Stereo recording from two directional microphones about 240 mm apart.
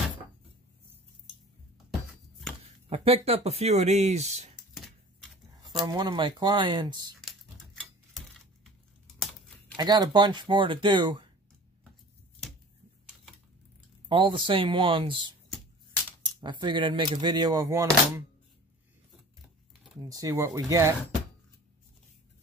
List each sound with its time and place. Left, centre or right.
2.9 s speech: right
4.7 s typewriter: centre
5.6 s speech: centre
7.2 s a sound: centre
9.8 s speech: centre
14.0 s speech: right
16.3 s speech: centre
20.0 s speech: centre